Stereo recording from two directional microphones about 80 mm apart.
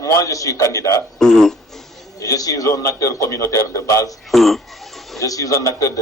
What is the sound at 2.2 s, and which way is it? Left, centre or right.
A man's voice, left.